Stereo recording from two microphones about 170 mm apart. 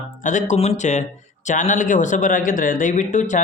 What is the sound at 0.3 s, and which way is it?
A man's voice, 45° left (ahead or behind).